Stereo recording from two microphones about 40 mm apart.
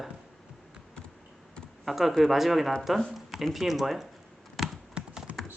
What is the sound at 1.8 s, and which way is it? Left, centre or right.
Speech, centre.